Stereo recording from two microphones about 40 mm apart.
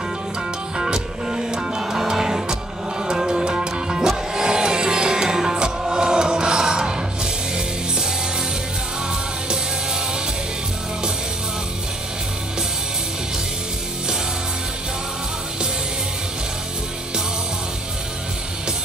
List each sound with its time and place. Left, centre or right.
0.7 s music: centre